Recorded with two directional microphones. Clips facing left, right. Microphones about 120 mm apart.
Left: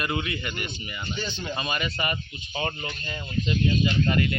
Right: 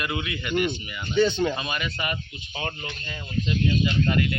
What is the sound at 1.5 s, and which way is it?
Speech, centre (ahead or behind).